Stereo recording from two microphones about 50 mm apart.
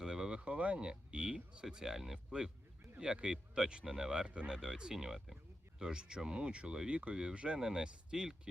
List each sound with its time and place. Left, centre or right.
0.0 s a sound: centre
1.6 s speech: centre
3.0 s speech: centre
5.8 s speech: centre